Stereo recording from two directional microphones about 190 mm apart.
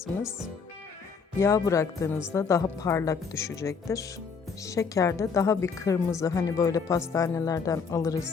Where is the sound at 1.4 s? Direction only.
15° left (ahead or behind).